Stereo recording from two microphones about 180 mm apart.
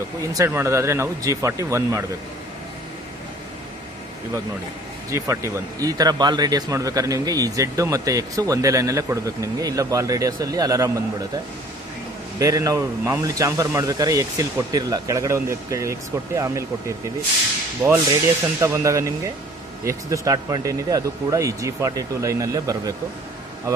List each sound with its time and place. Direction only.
0.3 s speech: 15° right (ahead or behind)
5.1 s speech: 15° right (ahead or behind)
12.4 s speech: 20° right (ahead or behind)
18.6 s speech: 15° right (ahead or behind)